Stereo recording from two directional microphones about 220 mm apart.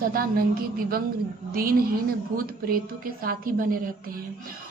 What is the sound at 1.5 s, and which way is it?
A woman's voice, 40° right (ahead or behind).